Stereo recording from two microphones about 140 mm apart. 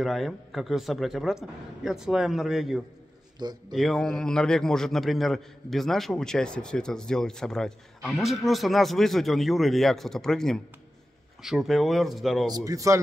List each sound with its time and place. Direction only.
0.0 s a man's voice: centre (ahead or behind)
3.3 s a man's voice: 30° right (ahead or behind)
3.7 s a man's voice: centre (ahead or behind)
12.4 s speech: 25° right (ahead or behind)